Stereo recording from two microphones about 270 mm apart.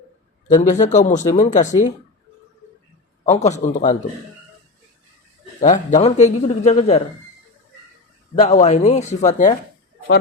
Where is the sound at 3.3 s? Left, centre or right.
Left.